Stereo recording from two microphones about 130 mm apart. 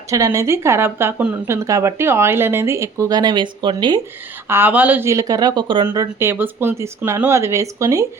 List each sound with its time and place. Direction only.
0.1 s speech: 25° right (ahead or behind)
4.4 s speech: 15° right (ahead or behind); by 5.8 s 40° right (ahead or behind)
6.1 s speech: 15° right (ahead or behind)